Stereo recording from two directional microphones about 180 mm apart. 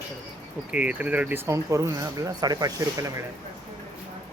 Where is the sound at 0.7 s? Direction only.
5° right (ahead or behind).